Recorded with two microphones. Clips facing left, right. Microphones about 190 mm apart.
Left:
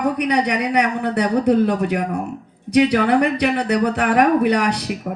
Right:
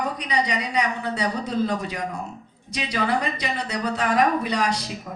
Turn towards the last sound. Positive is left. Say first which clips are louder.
# left 4 dB
turn(degrees=65)  # may be behind; listen again after turning